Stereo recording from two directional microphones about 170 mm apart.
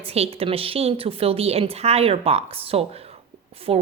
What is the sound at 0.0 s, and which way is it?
A woman's voice, 35° right (ahead or behind).